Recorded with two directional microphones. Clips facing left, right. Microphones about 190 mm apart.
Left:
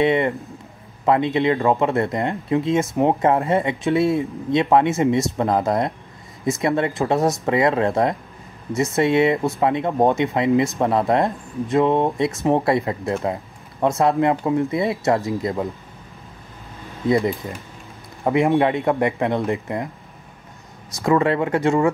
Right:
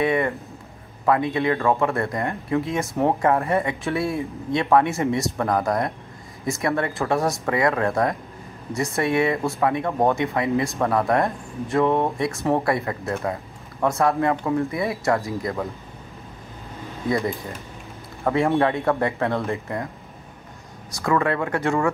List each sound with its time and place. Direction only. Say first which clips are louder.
0.0 s speech: left 3 dB; 25° left (ahead or behind)
18.2 s a man's voice: left 3 dB; 15° left (ahead or behind)
20.9 s speech: left 4 dB; 20° left (ahead or behind)